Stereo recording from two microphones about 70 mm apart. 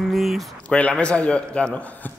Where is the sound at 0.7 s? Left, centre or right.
Centre.